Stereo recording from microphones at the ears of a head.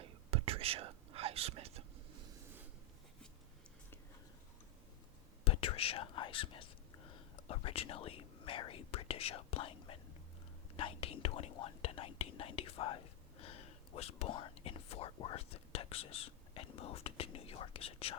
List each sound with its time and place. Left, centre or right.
0.0 s whispering: right
5.5 s whispering: left
10.8 s speech: left